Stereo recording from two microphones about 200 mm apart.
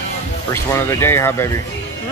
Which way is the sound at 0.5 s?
15° left (ahead or behind).